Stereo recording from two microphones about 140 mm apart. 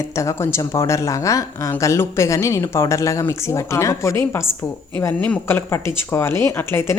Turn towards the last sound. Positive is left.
turn(degrees=15)  # may be behind; listen again after turning